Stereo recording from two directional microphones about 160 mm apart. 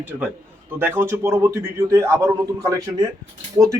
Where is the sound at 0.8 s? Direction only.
15° right (ahead or behind).